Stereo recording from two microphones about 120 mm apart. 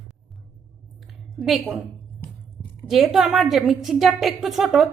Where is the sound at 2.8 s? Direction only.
Centre (ahead or behind).